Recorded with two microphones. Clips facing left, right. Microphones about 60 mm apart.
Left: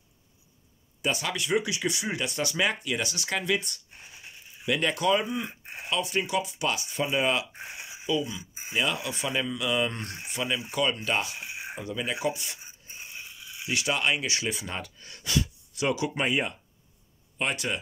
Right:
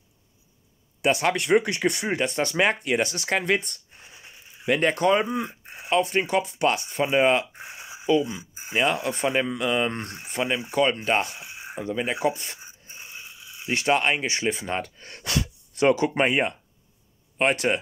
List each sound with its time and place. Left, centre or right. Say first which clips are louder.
1.2 s speech: right 7 dB; right
3.3 s speech: right 2 dB; right
7.1 s speech: right 7 dB; right
7.7 s a sound: right 7 dB; right
8.7 s speech: right 5 dB; right
11.7 s speech: right 6 dB; right
13.7 s speech: right 5 dB; right